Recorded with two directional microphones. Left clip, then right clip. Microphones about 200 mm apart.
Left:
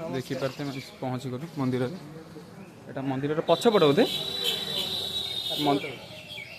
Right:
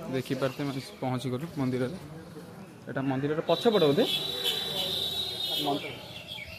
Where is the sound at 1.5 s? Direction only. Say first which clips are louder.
Left 3 dB; 5° left (ahead or behind).